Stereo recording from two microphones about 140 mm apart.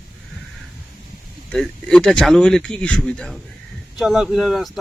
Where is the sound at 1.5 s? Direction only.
5° left (ahead or behind).